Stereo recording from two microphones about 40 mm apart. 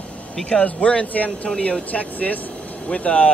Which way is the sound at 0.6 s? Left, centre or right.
Left.